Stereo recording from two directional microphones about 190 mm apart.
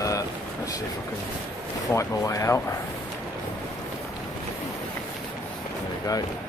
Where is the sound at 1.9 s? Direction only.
15° left (ahead or behind).